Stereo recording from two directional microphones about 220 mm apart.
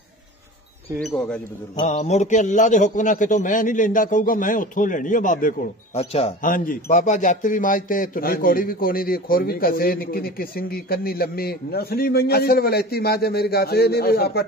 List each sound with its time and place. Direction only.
1.1 s speech: 5° left (ahead or behind)
1.8 s a man's voice: 30° left (ahead or behind)